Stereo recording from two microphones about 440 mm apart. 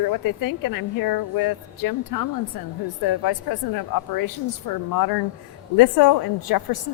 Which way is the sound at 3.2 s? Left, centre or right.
Left.